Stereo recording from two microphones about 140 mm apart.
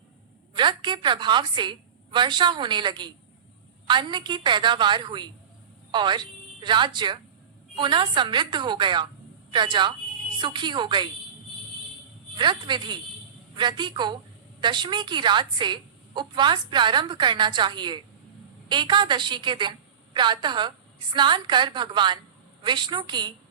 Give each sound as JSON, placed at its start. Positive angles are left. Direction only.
{"t": 0.5, "sound": "a woman's voice", "side_deg": -35}
{"t": 12.4, "sound": "a woman's voice", "side_deg": -35}